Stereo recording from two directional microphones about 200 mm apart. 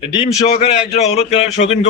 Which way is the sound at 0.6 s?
30° left (ahead or behind).